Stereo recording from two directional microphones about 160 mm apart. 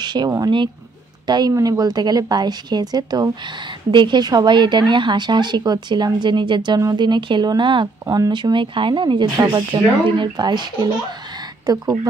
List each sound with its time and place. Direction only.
0.0 s speech: 25° right (ahead or behind)